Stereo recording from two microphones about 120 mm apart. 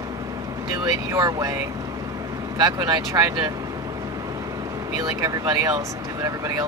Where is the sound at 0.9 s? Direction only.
30° right (ahead or behind).